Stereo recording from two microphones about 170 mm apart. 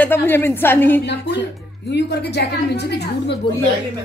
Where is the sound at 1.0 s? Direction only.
85° left.